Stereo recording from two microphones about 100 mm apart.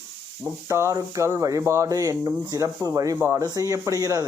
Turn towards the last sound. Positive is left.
turn(degrees=-35)  # may be behind; listen again after turning